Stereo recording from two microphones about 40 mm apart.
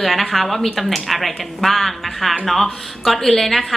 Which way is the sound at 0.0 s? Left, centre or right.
Centre.